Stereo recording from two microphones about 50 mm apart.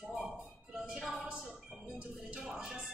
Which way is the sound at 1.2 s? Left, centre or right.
Centre.